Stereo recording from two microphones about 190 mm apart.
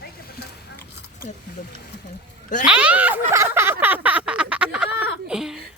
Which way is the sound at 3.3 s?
15° right (ahead or behind).